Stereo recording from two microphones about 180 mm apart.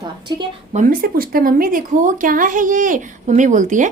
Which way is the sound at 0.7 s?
50° right (ahead or behind).